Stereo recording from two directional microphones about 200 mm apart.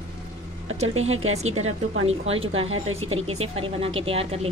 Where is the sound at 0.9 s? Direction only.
90° right.